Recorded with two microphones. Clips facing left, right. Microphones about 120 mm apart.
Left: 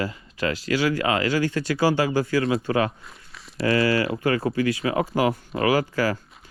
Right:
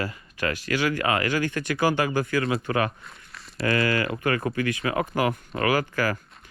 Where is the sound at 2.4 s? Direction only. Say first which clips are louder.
Left 3 dB; 30° left (ahead or behind).